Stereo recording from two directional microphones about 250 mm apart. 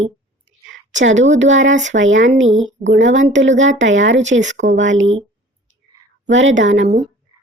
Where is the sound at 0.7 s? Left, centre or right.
Right.